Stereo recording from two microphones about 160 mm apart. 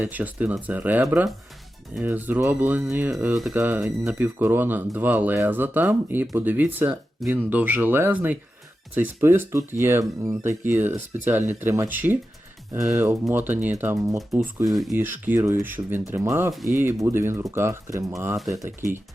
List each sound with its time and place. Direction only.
0.0 s speech: 10° right (ahead or behind)
7.2 s speech: centre (ahead or behind)
7.5 s speech: 10° right (ahead or behind)
14.3 s speech: centre (ahead or behind)
14.9 s speech: 10° right (ahead or behind)